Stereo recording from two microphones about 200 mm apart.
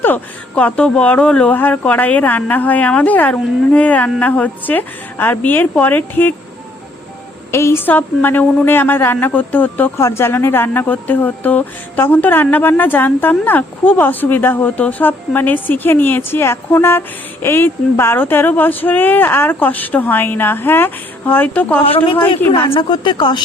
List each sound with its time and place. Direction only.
0.0 s a woman's voice: 10° left (ahead or behind)
7.5 s a woman's voice: 15° left (ahead or behind)
21.8 s speech: 25° left (ahead or behind)